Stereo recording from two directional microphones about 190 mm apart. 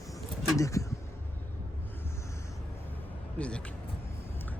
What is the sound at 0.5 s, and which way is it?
Speech, 15° left (ahead or behind).